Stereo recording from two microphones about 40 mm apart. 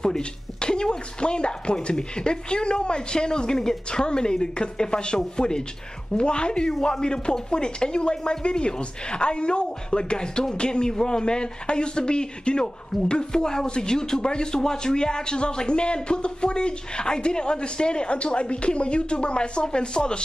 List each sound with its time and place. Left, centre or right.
0.0 s speech: centre